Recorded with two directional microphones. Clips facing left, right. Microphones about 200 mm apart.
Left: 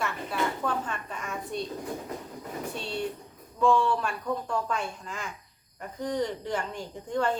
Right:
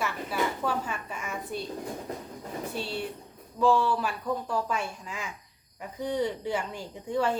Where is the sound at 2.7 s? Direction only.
5° right (ahead or behind).